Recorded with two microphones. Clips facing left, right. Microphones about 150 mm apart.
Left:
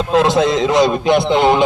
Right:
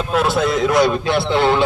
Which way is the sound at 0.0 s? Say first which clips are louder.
Left 4 dB; 25° left (ahead or behind).